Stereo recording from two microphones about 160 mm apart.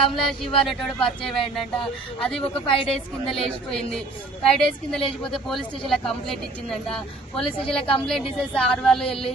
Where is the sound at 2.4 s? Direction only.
35° left (ahead or behind).